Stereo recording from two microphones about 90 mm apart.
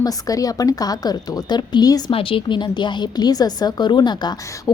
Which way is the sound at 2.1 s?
90° left.